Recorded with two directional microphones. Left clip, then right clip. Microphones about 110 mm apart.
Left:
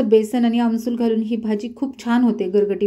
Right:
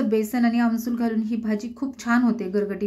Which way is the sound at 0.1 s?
30° left (ahead or behind).